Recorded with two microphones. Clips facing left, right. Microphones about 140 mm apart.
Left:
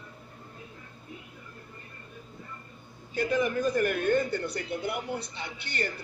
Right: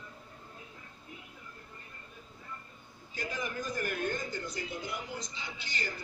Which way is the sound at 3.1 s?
65° left (ahead or behind).